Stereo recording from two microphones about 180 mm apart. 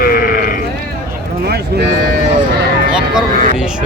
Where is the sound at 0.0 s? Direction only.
55° left (ahead or behind).